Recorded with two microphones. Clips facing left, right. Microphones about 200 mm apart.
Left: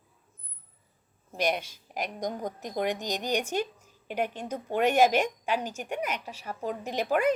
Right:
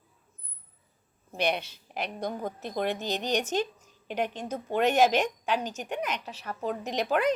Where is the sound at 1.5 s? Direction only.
10° left (ahead or behind).